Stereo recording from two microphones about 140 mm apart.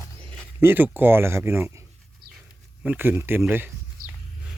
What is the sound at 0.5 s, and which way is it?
Speech, 15° right (ahead or behind).